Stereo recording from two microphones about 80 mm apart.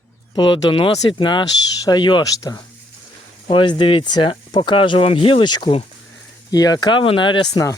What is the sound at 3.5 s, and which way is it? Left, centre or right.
Speech, left.